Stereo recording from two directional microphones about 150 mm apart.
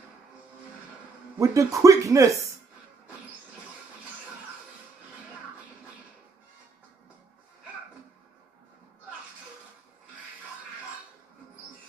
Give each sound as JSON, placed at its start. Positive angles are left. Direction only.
{"t": 1.4, "sound": "speech", "side_deg": -20}